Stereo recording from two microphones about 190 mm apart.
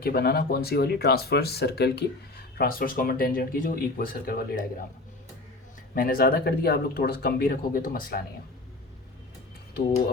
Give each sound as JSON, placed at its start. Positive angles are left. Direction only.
{"t": 0.0, "sound": "speech", "side_deg": 55}
{"t": 5.9, "sound": "speech", "side_deg": 50}